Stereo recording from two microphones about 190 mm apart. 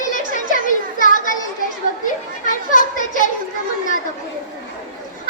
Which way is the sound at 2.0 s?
45° left (ahead or behind).